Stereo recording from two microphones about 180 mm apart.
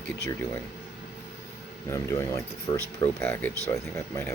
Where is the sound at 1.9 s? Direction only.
15° left (ahead or behind).